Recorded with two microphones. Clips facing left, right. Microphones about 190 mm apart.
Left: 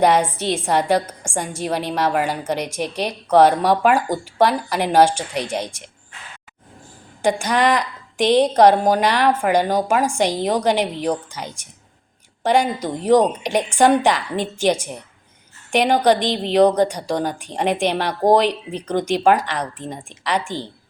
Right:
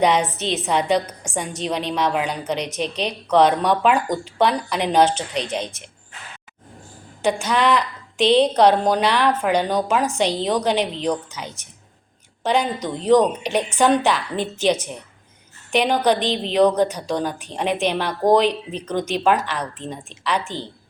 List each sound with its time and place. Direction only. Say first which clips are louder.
0.2 s a woman's voice: left 2 dB; 10° left (ahead or behind)
1.9 s a woman's voice: left 2 dB; 55° left (ahead or behind)
2.5 s a woman's voice: left 1 dB; 10° left (ahead or behind)
7.2 s a woman's voice: left 2 dB; 10° left (ahead or behind)